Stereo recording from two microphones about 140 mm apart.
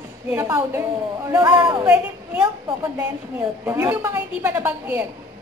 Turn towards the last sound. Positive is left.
turn(degrees=-15)  # may be behind; listen again after turning